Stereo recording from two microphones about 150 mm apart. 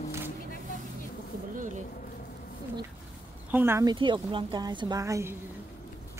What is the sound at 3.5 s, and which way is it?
Speech, 15° right (ahead or behind).